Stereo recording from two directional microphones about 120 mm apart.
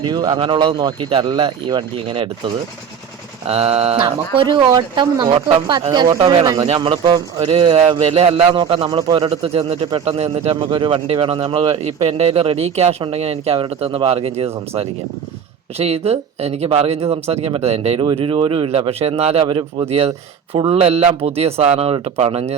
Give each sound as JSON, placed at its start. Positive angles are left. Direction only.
{"t": 0.0, "sound": "a man's voice", "side_deg": -35}
{"t": 3.4, "sound": "speech", "side_deg": -55}
{"t": 4.4, "sound": "a man's voice", "side_deg": -40}
{"t": 15.8, "sound": "speech", "side_deg": -60}
{"t": 18.0, "sound": "a man's voice", "side_deg": -50}
{"t": 20.5, "sound": "speech", "side_deg": -55}